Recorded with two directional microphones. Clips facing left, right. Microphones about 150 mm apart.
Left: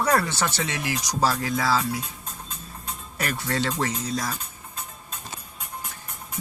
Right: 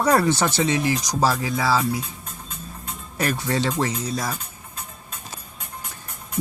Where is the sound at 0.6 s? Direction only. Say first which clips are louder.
Right 8 dB; 35° right (ahead or behind).